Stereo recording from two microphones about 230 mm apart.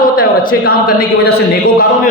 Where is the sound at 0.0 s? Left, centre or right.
Left.